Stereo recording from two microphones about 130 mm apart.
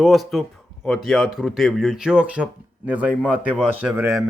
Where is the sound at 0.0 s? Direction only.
Centre (ahead or behind).